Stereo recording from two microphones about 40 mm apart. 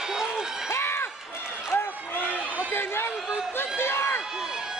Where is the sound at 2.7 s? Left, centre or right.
Left.